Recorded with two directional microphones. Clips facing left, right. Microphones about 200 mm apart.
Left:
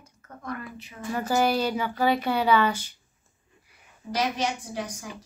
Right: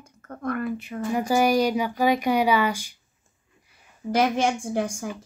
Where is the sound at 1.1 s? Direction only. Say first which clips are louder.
Right 3 dB; 15° right (ahead or behind).